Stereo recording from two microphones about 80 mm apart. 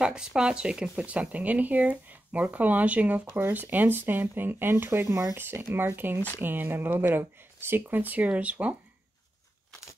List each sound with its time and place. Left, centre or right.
0.0 s speech: centre